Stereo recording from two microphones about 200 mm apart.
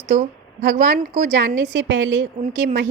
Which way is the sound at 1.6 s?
80° right.